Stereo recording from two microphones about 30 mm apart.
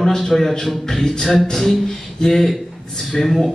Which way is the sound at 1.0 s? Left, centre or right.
Centre.